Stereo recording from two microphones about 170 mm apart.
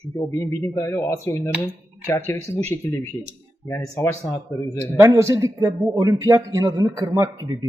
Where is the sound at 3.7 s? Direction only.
15° left (ahead or behind).